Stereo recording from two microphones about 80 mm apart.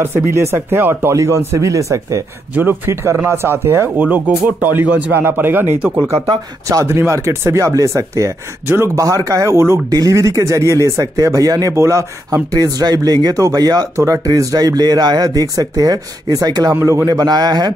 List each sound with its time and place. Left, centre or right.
0.0 s speech: right
2.5 s speech: right
3.3 s speech: right
6.7 s speech: right
9.8 s speech: right
12.5 s speech: right
13.9 s speech: right
16.7 s speech: right